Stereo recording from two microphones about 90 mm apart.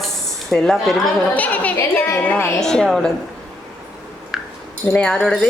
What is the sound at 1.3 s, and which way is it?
A woman's voice, 15° left (ahead or behind).